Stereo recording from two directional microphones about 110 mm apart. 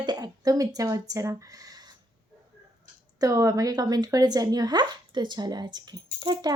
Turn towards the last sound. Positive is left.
turn(degrees=-40)  # may be behind; listen again after turning